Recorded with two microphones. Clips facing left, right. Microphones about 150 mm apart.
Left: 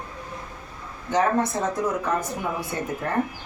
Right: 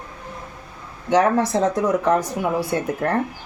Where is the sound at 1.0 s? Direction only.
90° right.